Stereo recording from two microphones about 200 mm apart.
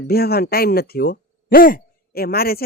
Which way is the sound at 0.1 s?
50° left (ahead or behind).